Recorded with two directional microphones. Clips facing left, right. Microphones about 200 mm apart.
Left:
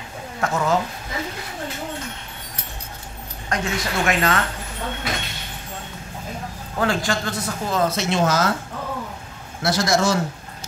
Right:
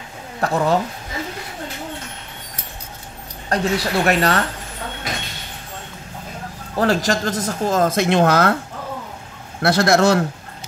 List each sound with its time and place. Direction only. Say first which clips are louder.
0.4 s speech: right 3 dB; 35° right (ahead or behind)
3.4 s speech: right 5 dB; 35° right (ahead or behind)
6.8 s speech: right 4 dB; 40° right (ahead or behind); by 8.5 s 60° right (ahead or behind)
9.6 s a man's voice: right 5 dB; 60° right (ahead or behind)